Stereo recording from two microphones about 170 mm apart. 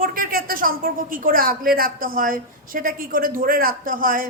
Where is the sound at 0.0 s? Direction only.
55° right (ahead or behind).